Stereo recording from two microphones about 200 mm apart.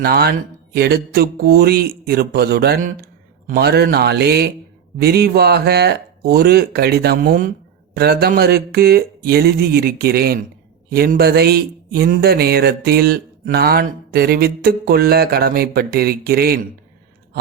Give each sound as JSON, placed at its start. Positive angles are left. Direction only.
{"t": 0.0, "sound": "speech", "side_deg": -50}